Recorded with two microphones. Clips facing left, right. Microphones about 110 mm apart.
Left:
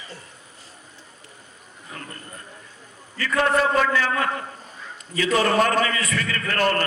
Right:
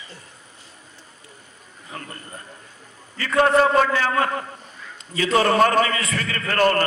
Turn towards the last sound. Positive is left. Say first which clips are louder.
# right 3 dB
turn(degrees=-40)  # may be behind; listen again after turning